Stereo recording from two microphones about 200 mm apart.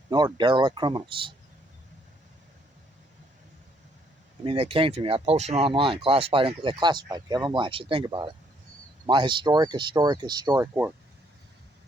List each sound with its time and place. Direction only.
0.1 s speech: 20° right (ahead or behind)
4.4 s speech: 30° right (ahead or behind); by 10.9 s 10° right (ahead or behind)